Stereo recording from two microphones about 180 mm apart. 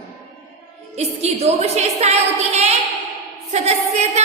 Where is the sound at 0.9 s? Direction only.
35° right (ahead or behind).